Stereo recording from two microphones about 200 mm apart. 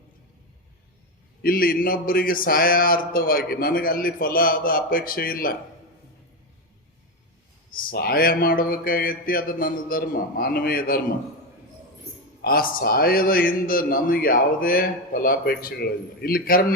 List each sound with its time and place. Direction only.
1.4 s a man's voice: 45° left (ahead or behind)
7.7 s a man's voice: 45° left (ahead or behind)
12.4 s a man's voice: 50° left (ahead or behind)